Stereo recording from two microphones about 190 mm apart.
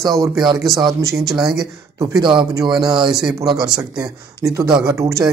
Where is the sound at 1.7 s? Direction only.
20° right (ahead or behind).